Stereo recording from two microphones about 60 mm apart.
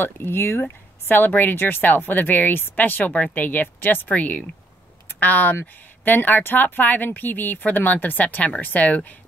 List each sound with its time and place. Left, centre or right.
0.0 s speech: left